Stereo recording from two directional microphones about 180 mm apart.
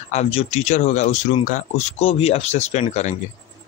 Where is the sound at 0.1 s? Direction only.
35° left (ahead or behind).